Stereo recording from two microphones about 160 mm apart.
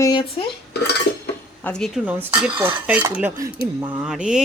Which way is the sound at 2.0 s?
10° right (ahead or behind).